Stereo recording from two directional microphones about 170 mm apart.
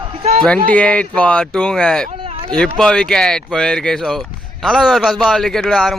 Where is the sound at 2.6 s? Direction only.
5° left (ahead or behind).